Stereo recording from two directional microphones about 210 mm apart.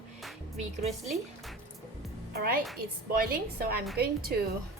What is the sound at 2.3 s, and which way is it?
Speech, 45° right (ahead or behind).